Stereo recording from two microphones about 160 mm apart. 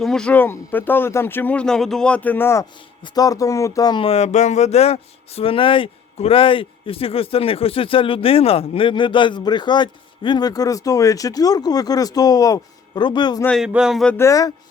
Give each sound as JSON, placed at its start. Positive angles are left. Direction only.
{"t": 0.0, "sound": "speech", "side_deg": 5}
{"t": 13.6, "sound": "a sound", "side_deg": -5}
{"t": 14.2, "sound": "speech", "side_deg": 20}